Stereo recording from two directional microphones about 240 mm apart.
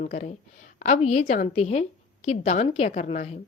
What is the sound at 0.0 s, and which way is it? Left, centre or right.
A woman's voice, left.